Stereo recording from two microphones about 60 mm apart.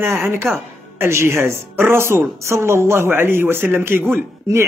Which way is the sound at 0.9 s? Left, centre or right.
Right.